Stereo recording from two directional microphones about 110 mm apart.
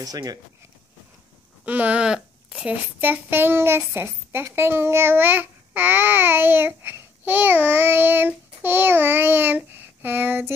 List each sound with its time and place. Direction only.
0.0 s speech: 35° right (ahead or behind)
1.7 s a sound: 15° right (ahead or behind)
2.5 s a child's voice: 10° right (ahead or behind)